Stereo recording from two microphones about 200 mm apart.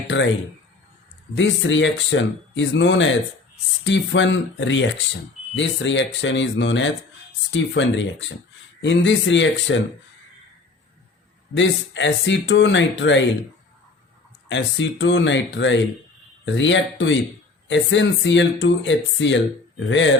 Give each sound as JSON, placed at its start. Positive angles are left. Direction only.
{"t": 0.1, "sound": "speech", "side_deg": 60}
{"t": 1.4, "sound": "speech", "side_deg": 65}
{"t": 11.5, "sound": "speech", "side_deg": 65}
{"t": 14.5, "sound": "speech", "side_deg": 65}